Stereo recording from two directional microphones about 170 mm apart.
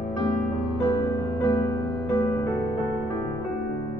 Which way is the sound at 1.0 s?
20° left (ahead or behind).